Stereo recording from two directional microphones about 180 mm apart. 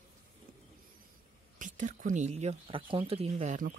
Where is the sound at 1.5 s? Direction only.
45° right (ahead or behind).